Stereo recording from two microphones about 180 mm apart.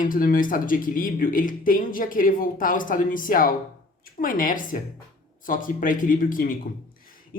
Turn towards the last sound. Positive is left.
turn(degrees=50)  # may be behind; listen again after turning